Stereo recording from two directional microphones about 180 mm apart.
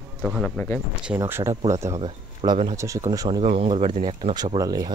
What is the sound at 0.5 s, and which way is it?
Speech, 10° left (ahead or behind).